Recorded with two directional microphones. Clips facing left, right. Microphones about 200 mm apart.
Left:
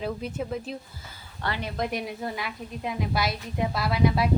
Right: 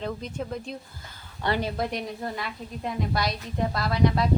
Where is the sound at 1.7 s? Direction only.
Centre (ahead or behind).